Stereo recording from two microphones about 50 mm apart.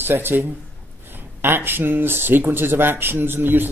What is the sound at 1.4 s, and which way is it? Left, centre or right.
Speech, right.